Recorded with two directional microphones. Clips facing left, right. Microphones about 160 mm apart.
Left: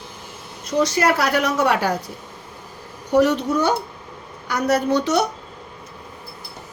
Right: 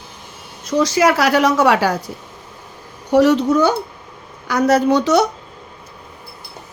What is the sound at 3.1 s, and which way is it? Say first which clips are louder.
A woman's voice: right 4 dB; 90° right.